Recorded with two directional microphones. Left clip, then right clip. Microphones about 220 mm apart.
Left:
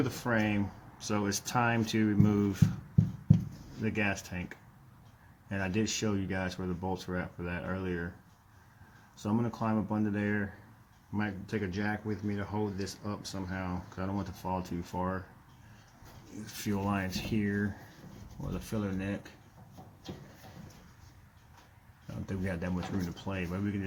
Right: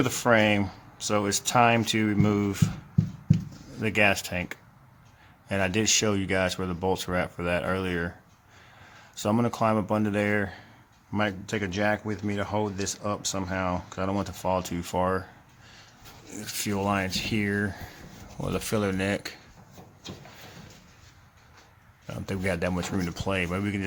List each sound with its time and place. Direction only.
0.0 s speech: 30° right (ahead or behind)
3.8 s speech: 30° right (ahead or behind)
9.1 s speech: 30° right (ahead or behind)
16.6 s speech: 20° right (ahead or behind)
22.3 s speech: 30° right (ahead or behind)